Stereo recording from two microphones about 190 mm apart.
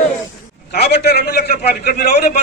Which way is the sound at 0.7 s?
55° left (ahead or behind).